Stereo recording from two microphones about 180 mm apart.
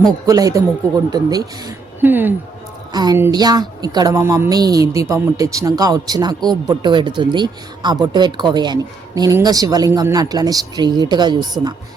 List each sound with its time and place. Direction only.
0.3 s a woman's voice: 20° right (ahead or behind)
2.0 s speech: 10° right (ahead or behind)
2.9 s a woman's voice: 20° right (ahead or behind)